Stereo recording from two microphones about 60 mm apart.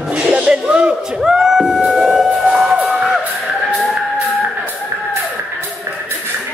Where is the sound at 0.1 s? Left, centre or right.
Centre.